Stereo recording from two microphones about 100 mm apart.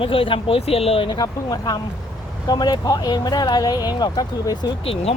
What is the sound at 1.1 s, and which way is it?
Speech, 40° left (ahead or behind).